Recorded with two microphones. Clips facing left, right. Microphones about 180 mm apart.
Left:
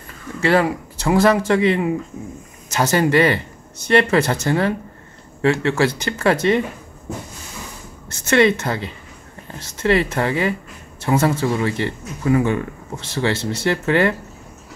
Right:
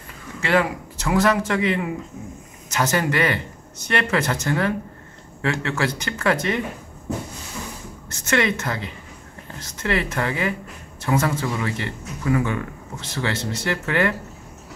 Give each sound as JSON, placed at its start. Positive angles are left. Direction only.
{"t": 0.4, "sound": "speech", "side_deg": 35}
{"t": 8.3, "sound": "speech", "side_deg": 30}